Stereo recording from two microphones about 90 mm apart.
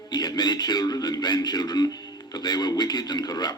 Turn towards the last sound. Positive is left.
turn(degrees=50)  # may be behind; listen again after turning